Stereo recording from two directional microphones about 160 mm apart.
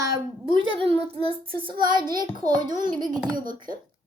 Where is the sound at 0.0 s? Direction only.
20° right (ahead or behind).